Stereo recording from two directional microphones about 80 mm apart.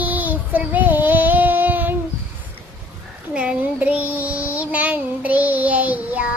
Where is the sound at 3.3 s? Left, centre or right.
Centre.